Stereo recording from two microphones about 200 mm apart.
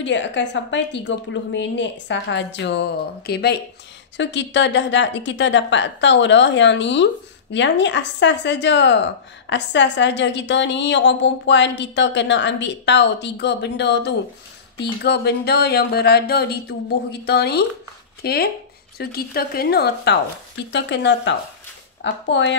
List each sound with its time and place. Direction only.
0.0 s a woman's voice: 65° left (ahead or behind)